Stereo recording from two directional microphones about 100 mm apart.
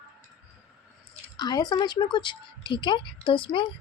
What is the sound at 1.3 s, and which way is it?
A woman's voice, 40° left (ahead or behind).